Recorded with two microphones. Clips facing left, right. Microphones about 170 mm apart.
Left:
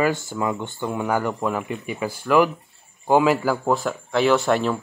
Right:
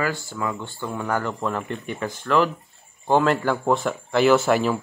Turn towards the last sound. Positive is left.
turn(degrees=-5)  # may be behind; listen again after turning